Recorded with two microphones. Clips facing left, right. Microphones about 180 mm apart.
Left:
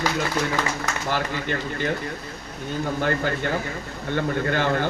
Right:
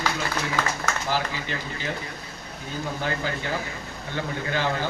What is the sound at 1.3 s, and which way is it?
Speech, 55° left (ahead or behind).